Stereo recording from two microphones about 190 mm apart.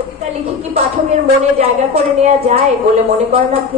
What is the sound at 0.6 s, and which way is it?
A woman's voice, 35° right (ahead or behind).